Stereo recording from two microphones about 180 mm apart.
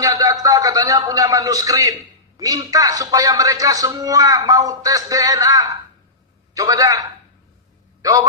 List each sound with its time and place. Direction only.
0.0 s a man's voice: 20° right (ahead or behind)